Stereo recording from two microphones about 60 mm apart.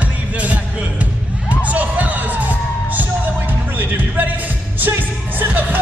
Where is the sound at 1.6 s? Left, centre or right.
Right.